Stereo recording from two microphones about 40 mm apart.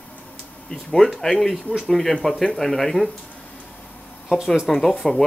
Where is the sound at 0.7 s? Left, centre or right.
Centre.